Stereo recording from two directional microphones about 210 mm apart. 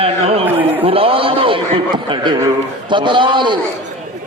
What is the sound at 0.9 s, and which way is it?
A man's voice, 25° right (ahead or behind).